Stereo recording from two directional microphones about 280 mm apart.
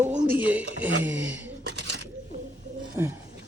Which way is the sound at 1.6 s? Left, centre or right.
Right.